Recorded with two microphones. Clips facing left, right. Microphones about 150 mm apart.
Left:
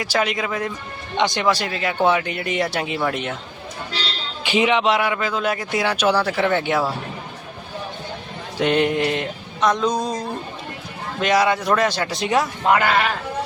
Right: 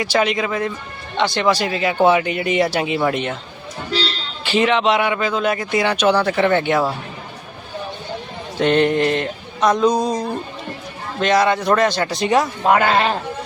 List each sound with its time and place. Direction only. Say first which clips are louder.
0.0 s a man's voice: right 4 dB; centre (ahead or behind)
1.1 s speech: right 1 dB; 15° left (ahead or behind)
1.5 s a man's voice: right 3 dB; centre (ahead or behind)
4.4 s a man's voice: right 2 dB; 10° left (ahead or behind)
8.5 s a sound: right 3 dB; 10° left (ahead or behind)
11.2 s a man's voice: right 2 dB; 10° left (ahead or behind)
12.6 s speech: right 2 dB; 20° right (ahead or behind)